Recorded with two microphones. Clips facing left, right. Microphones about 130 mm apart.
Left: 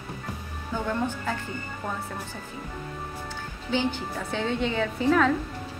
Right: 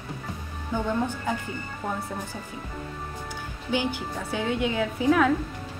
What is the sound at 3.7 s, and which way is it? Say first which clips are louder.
Speech: even; 10° right (ahead or behind).